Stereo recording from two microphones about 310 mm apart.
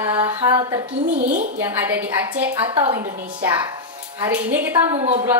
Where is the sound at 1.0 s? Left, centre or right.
Right.